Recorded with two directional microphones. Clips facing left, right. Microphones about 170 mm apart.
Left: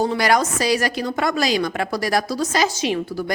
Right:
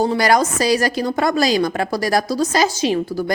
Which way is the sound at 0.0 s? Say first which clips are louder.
Right 3 dB; 35° right (ahead or behind).